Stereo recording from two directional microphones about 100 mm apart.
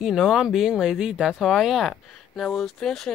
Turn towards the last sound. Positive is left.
turn(degrees=5)  # may be behind; listen again after turning